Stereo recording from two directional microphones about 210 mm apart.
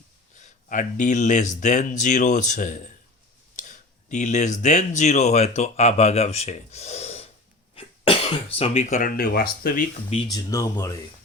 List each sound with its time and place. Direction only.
0.3 s speech: 35° left (ahead or behind)
10.3 s speech: 15° left (ahead or behind)